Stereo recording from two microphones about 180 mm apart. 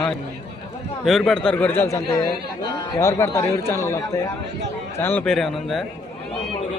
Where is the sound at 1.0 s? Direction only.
Centre (ahead or behind).